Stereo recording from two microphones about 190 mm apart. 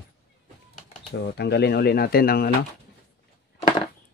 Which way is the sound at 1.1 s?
60° left (ahead or behind).